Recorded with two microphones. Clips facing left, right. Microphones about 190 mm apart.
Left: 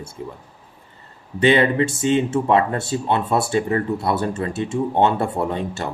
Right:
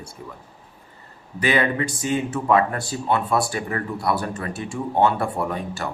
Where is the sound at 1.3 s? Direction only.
25° left (ahead or behind).